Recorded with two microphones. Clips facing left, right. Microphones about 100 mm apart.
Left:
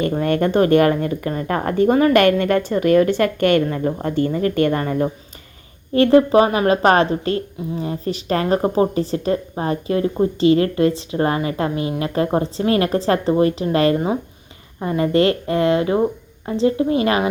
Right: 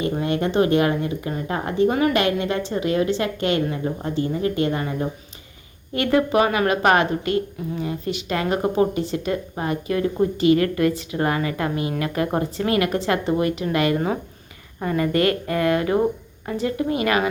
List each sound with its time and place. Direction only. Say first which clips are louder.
0.0 s a woman's voice: left 4 dB; 50° left (ahead or behind)
5.9 s a woman's voice: left 7 dB; 35° left (ahead or behind)